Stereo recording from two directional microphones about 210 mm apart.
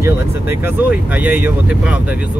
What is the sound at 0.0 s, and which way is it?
Speech, 10° right (ahead or behind).